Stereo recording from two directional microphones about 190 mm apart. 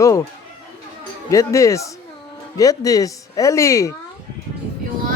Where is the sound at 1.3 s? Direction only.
15° left (ahead or behind).